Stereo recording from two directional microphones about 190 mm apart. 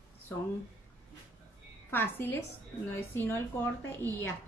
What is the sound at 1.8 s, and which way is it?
A woman's voice, 10° left (ahead or behind).